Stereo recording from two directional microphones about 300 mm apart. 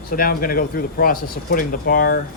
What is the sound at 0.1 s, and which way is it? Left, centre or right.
Speech, left.